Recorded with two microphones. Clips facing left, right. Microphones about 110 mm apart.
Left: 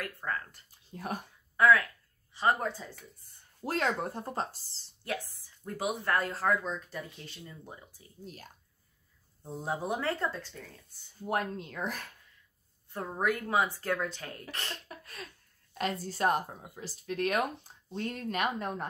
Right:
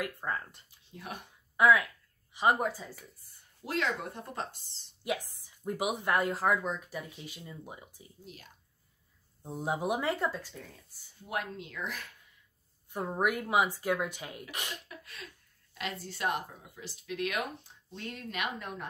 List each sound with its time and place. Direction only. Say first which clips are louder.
0.0 s speech: right 1 dB; 20° right (ahead or behind)
0.7 s a sound: left 6 dB; 40° left (ahead or behind)
1.6 s speech: even; 15° right (ahead or behind)
3.6 s speech: left 2 dB; 40° left (ahead or behind)
5.0 s speech: right 2 dB; 15° right (ahead or behind)
9.4 s speech: right 2 dB; 10° right (ahead or behind)
11.1 s speech: left 4 dB; 40° left (ahead or behind)
12.9 s speech: right 1 dB; 15° right (ahead or behind)
14.9 s a sound: left 2 dB; 40° left (ahead or behind)
15.8 s speech: left 5 dB; 40° left (ahead or behind)